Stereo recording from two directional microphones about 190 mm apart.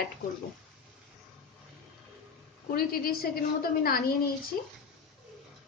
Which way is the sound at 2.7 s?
55° left (ahead or behind).